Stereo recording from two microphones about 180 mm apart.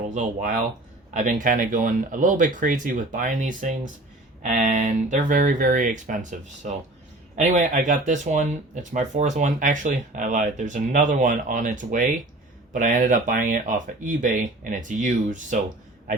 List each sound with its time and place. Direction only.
0.1 s speech: 40° right (ahead or behind)
7.3 s speech: 40° right (ahead or behind)